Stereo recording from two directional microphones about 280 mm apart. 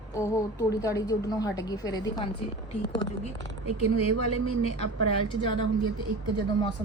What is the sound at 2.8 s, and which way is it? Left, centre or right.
Speech, left.